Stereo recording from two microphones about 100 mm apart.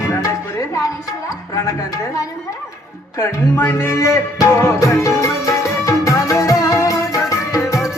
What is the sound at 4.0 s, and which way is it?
Music, 35° left (ahead or behind).